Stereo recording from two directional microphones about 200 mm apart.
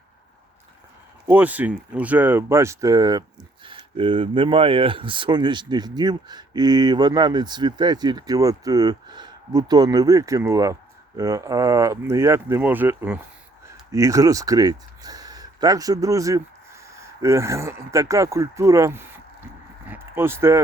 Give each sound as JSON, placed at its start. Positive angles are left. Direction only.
{"t": 1.3, "sound": "speech", "side_deg": -10}